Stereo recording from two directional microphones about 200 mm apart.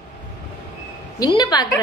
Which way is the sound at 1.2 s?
20° left (ahead or behind).